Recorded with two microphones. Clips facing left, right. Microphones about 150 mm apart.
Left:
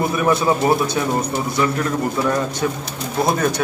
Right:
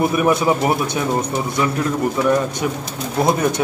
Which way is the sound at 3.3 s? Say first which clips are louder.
Right 1 dB; 20° right (ahead or behind).